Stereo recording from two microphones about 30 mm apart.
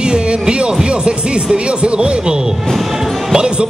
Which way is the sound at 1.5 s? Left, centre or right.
Right.